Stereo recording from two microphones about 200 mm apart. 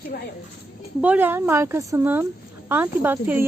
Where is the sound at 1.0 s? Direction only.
10° right (ahead or behind).